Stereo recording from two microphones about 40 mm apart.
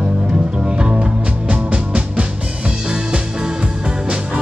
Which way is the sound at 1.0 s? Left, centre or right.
Right.